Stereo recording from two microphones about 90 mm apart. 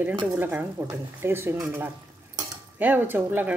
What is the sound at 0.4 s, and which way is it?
Speech, 20° right (ahead or behind).